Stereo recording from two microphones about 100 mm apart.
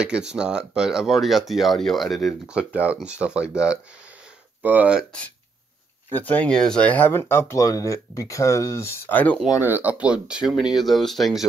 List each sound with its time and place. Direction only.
0.0 s speech: 10° right (ahead or behind)
2.4 s speech: 10° right (ahead or behind)
6.1 s speech: 15° left (ahead or behind)
9.6 s speech: 20° right (ahead or behind); by 11.4 s centre (ahead or behind)